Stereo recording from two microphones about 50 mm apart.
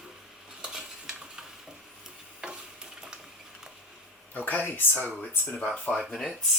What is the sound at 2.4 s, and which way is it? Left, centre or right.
Stir, centre.